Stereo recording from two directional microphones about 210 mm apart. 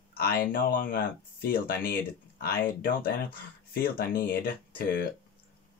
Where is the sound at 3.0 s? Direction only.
45° left (ahead or behind).